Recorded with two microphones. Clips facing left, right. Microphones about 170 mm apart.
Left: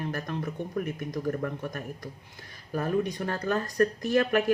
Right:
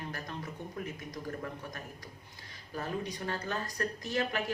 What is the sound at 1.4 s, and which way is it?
Speech, 55° left (ahead or behind).